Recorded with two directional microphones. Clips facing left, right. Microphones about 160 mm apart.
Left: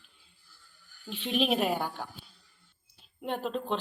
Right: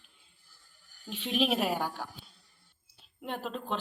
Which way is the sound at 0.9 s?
40° right (ahead or behind).